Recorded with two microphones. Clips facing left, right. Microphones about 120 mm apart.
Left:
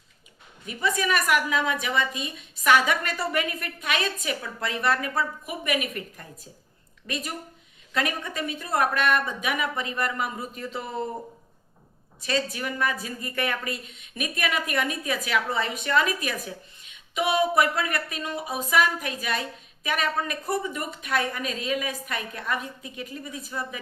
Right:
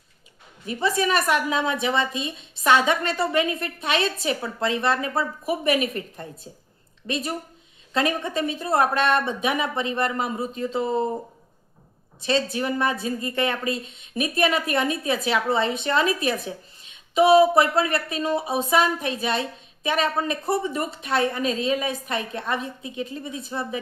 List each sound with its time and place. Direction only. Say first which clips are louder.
0.6 s a woman's voice: right 4 dB; 30° right (ahead or behind)
12.2 s a woman's voice: right 5 dB; 30° right (ahead or behind)